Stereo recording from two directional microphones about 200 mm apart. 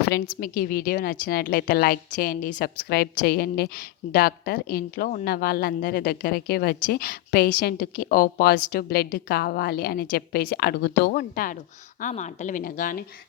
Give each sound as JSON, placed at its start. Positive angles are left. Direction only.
{"t": 0.0, "sound": "a woman's voice", "side_deg": 50}